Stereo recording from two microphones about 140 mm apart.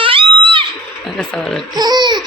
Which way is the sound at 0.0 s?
35° right (ahead or behind).